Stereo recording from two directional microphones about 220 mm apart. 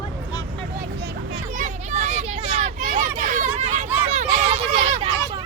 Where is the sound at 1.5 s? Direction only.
35° right (ahead or behind).